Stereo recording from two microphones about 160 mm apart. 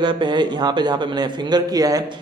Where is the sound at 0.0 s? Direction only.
30° right (ahead or behind).